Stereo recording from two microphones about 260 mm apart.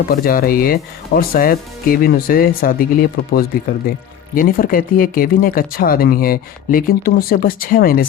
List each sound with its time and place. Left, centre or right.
0.1 s speech: left